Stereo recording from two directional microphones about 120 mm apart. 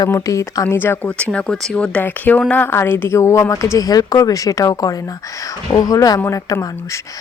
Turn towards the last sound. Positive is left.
turn(degrees=30)  # may be behind; listen again after turning